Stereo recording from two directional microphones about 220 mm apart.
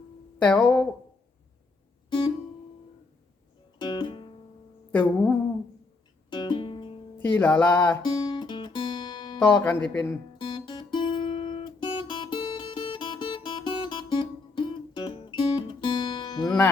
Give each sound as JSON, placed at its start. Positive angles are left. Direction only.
{"t": 0.4, "sound": "music", "side_deg": 10}
{"t": 2.0, "sound": "music", "side_deg": 20}
{"t": 3.8, "sound": "music", "side_deg": 20}
{"t": 4.9, "sound": "a sound", "side_deg": 10}
{"t": 6.3, "sound": "music", "side_deg": 20}
{"t": 7.3, "sound": "music", "side_deg": 10}
{"t": 8.0, "sound": "guitar", "side_deg": 20}
{"t": 9.4, "sound": "music", "side_deg": 10}
{"t": 10.3, "sound": "guitar", "side_deg": 20}